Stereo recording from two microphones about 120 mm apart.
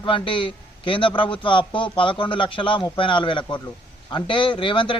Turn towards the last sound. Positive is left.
turn(degrees=45)  # may be behind; listen again after turning